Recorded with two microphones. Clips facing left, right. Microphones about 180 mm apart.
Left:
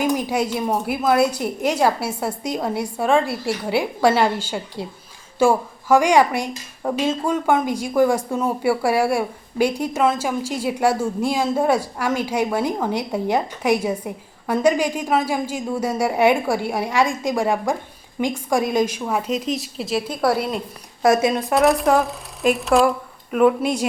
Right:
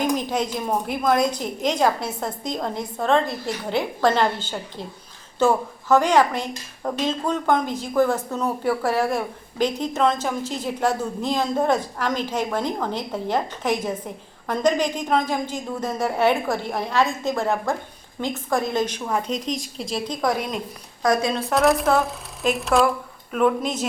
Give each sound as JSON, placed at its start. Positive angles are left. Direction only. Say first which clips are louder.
{"t": 0.0, "sound": "speech", "louder": "left 2 dB", "side_deg": 10}
{"t": 21.0, "sound": "speech", "louder": "left 4 dB", "side_deg": 25}
{"t": 21.5, "sound": "a woman's voice", "louder": "left 1 dB", "side_deg": 0}